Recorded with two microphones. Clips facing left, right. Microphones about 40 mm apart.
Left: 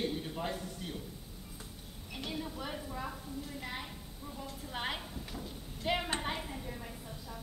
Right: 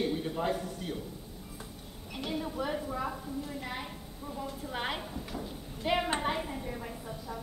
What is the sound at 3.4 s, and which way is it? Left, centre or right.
A woman's voice, centre.